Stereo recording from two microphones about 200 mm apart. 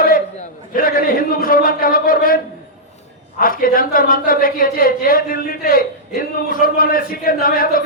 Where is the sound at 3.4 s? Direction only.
45° left (ahead or behind).